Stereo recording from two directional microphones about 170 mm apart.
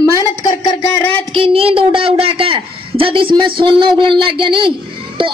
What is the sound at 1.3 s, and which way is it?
A woman's voice, 35° right (ahead or behind).